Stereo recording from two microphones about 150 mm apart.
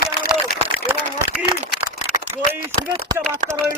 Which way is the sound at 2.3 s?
15° right (ahead or behind).